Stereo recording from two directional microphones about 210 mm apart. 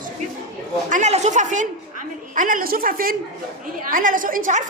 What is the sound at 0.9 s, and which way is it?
A woman's voice, 35° right (ahead or behind).